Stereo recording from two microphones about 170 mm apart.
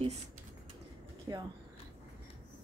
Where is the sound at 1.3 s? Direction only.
20° right (ahead or behind).